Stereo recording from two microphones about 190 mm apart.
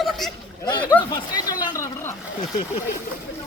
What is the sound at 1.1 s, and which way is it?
Speech, 20° left (ahead or behind).